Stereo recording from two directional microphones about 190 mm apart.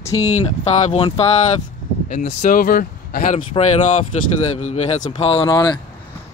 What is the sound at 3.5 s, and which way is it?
Speech, 25° left (ahead or behind).